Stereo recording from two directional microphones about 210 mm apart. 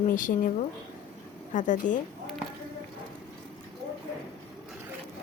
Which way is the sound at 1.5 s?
40° left (ahead or behind).